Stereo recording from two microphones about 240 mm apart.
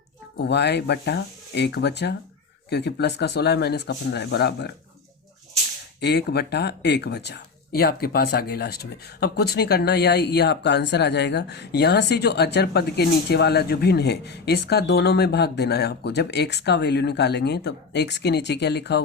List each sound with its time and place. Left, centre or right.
0.3 s speech: left
6.0 s speech: left